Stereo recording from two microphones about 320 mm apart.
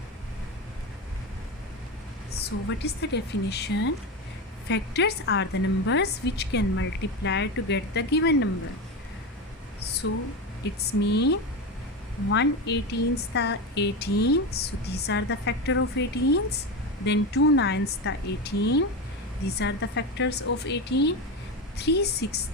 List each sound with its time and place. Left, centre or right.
2.6 s a woman's voice: left
9.8 s a sound: left
10.8 s a woman's voice: left